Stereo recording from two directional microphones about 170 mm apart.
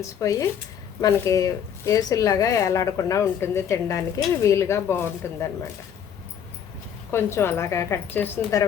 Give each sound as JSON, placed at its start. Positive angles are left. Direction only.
{"t": 0.0, "sound": "speech", "side_deg": 20}
{"t": 7.1, "sound": "speech", "side_deg": 15}